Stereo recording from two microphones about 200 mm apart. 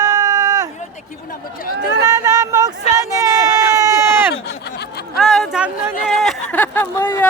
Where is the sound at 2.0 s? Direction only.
15° right (ahead or behind).